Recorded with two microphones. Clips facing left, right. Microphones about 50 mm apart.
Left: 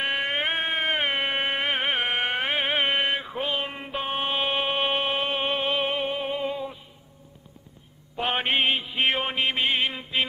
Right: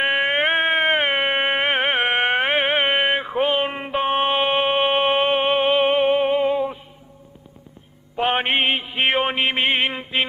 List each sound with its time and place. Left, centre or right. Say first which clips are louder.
0.0 s music: right 7 dB; right
8.2 s mantra: right 5 dB; right